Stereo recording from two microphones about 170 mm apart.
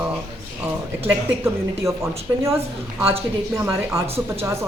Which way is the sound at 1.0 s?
15° right (ahead or behind).